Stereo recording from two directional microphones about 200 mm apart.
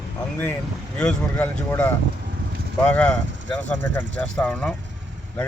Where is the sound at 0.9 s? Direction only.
5° left (ahead or behind).